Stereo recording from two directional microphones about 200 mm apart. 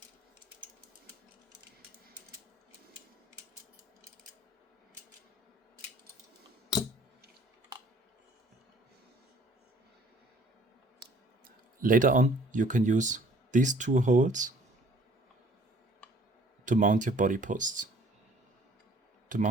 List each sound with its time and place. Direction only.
11.8 s speech: 40° right (ahead or behind)
16.6 s speech: 40° right (ahead or behind)